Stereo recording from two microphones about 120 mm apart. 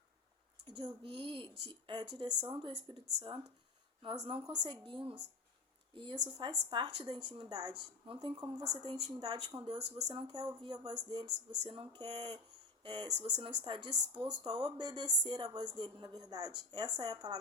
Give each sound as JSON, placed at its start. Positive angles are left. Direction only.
{"t": 0.6, "sound": "speech", "side_deg": -40}